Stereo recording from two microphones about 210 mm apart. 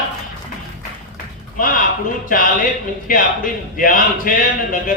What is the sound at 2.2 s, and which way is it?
A man's voice, 40° left (ahead or behind).